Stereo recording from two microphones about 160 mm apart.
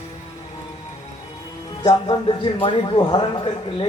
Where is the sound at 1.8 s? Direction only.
30° left (ahead or behind).